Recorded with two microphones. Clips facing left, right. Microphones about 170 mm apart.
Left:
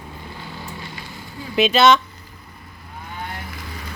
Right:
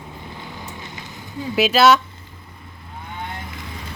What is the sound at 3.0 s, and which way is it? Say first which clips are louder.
Vehicle: even; 20° right (ahead or behind).